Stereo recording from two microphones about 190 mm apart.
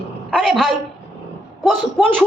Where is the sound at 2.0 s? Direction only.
5° left (ahead or behind).